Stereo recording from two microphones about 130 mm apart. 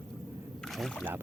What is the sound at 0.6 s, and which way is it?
Rowboat, 5° left (ahead or behind).